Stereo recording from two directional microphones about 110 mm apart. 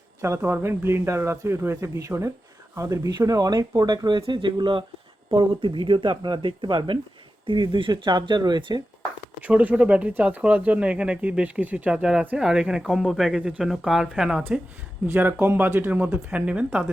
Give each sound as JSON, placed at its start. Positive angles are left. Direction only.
{"t": 0.2, "sound": "a man's voice", "side_deg": -25}
{"t": 9.5, "sound": "speech", "side_deg": -10}
{"t": 15.0, "sound": "speech", "side_deg": -20}